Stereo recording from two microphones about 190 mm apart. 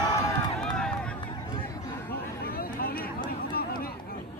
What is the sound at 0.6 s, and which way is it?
Run, 5° left (ahead or behind).